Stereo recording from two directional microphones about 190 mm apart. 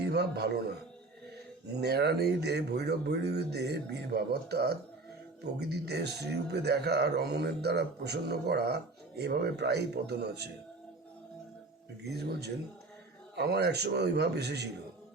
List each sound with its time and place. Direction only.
0.0 s a man's voice: 60° right (ahead or behind)
1.8 s speech: 60° right (ahead or behind)
12.0 s speech: 60° right (ahead or behind)